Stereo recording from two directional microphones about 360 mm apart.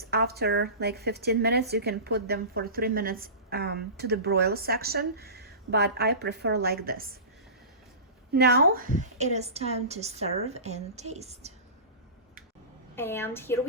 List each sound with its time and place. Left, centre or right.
0.0 s a woman's voice: right
8.3 s a woman's voice: right
13.0 s a woman's voice: centre